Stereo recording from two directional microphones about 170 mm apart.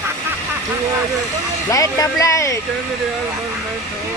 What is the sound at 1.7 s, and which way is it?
Speech, 20° left (ahead or behind).